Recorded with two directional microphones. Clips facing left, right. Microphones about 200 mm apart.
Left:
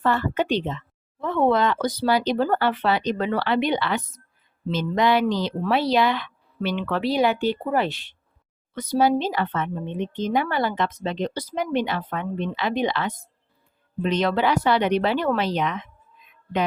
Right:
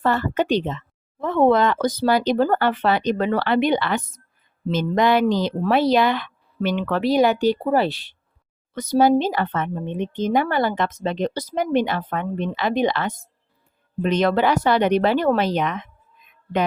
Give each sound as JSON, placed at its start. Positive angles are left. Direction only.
{"t": 0.0, "sound": "speech", "side_deg": -40}